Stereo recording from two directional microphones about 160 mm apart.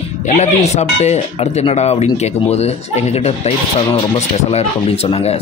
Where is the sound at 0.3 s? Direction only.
45° left (ahead or behind).